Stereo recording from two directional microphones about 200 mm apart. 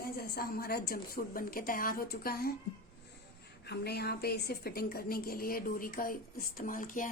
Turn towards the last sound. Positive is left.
turn(degrees=40)  # may be behind; listen again after turning